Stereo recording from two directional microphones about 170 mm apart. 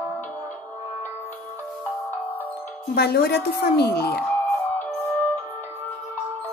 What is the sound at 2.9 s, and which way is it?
Speech, 70° left (ahead or behind).